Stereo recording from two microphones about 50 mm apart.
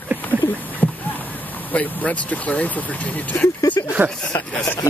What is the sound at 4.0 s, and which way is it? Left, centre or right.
Speech, right.